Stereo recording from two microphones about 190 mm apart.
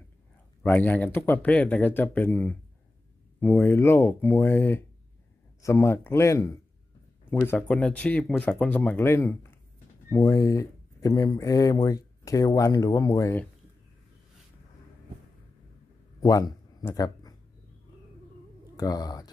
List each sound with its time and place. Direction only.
0.7 s speech: 10° left (ahead or behind)
16.2 s a sound: 20° left (ahead or behind)
18.8 s speech: 20° left (ahead or behind)